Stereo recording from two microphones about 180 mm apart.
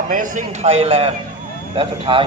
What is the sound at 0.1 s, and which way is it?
A man's voice, 45° right (ahead or behind).